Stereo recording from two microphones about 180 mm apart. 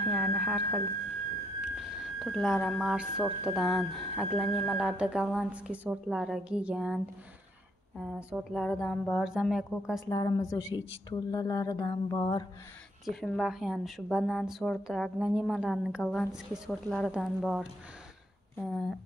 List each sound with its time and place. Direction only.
0.0 s a sound: centre (ahead or behind)
2.1 s speech: centre (ahead or behind)
8.0 s speech: 5° right (ahead or behind)
10.0 s speech: 20° left (ahead or behind)
13.0 s speech: centre (ahead or behind)